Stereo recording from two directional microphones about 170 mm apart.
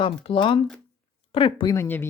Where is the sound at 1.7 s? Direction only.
15° left (ahead or behind).